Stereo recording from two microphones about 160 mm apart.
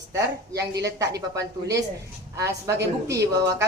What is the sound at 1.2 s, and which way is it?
Speech, 20° right (ahead or behind).